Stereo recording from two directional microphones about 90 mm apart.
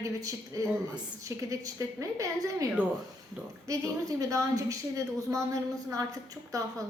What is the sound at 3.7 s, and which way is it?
A woman's voice, 40° right (ahead or behind).